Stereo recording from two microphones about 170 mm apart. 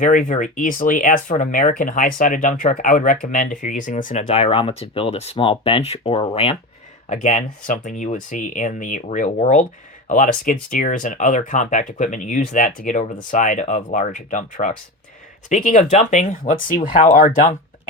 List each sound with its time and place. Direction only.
0.0 s speech: 50° left (ahead or behind)
7.1 s speech: 45° left (ahead or behind)